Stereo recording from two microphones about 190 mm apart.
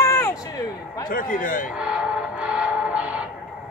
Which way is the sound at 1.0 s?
45° left (ahead or behind).